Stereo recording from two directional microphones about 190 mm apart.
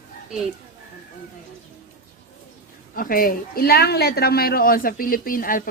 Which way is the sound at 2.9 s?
50° left (ahead or behind).